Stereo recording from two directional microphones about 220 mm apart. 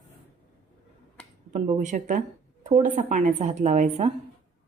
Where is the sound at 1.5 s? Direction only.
30° right (ahead or behind).